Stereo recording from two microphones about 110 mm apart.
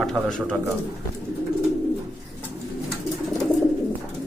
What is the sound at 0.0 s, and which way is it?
Speech, centre (ahead or behind).